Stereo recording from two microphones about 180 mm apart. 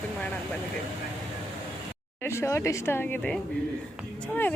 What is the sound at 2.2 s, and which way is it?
A woman's voice, 15° left (ahead or behind).